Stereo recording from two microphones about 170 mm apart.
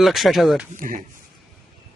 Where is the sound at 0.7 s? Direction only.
50° right (ahead or behind).